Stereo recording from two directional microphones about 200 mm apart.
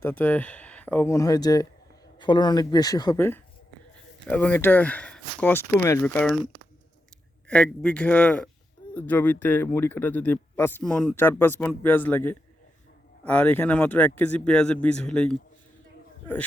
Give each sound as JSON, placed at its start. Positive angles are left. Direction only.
{"t": 0.0, "sound": "speech", "side_deg": 10}
{"t": 6.0, "sound": "speech", "side_deg": 5}
{"t": 7.4, "sound": "speech", "side_deg": 5}